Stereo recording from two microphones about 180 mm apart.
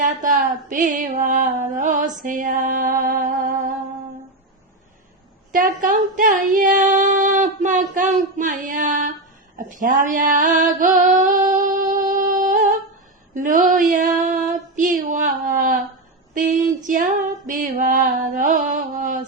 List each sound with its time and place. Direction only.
0.0 s female singing: 45° right (ahead or behind)
2.2 s music: 45° right (ahead or behind)
5.5 s female singing: 50° right (ahead or behind)
9.6 s a sound: 45° right (ahead or behind)
13.3 s speech: 45° right (ahead or behind)
13.9 s a sound: 45° right (ahead or behind)
16.3 s female singing: 45° right (ahead or behind)